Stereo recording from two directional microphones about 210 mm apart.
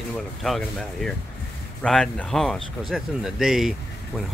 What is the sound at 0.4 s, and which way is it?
Speech, centre (ahead or behind).